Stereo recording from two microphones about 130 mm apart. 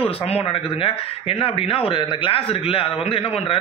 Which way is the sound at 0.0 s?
45° left (ahead or behind).